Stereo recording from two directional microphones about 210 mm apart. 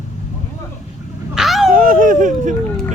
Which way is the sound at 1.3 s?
Centre (ahead or behind).